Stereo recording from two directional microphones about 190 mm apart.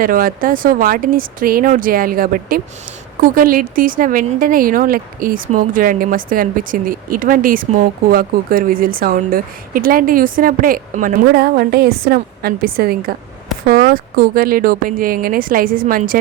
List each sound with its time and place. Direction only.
0.0 s a woman's voice: 45° right (ahead or behind)